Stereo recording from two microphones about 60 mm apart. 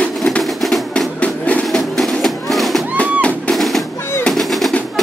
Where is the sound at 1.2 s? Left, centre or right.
Left.